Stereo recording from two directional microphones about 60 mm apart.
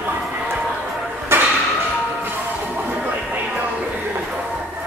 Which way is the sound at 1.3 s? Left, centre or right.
Right.